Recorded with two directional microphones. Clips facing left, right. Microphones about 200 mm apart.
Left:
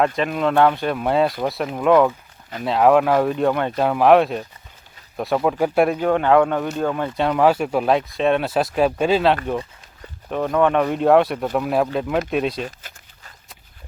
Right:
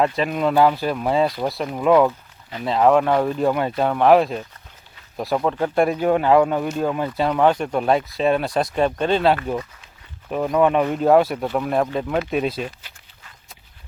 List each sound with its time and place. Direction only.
0.0 s speech: centre (ahead or behind)
6.0 s speech: 5° right (ahead or behind)
12.6 s a sound: 40° left (ahead or behind)